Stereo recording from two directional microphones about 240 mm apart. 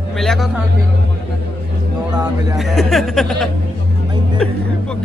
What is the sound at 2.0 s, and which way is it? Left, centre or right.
Speech, centre.